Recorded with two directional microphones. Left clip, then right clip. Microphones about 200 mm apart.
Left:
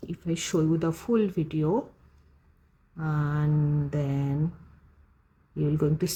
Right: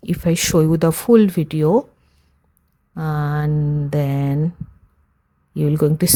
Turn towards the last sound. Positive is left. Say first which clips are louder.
# right 9 dB
turn(degrees=-50)  # may be behind; listen again after turning